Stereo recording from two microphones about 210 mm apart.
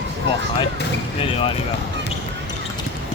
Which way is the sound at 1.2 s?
25° left (ahead or behind).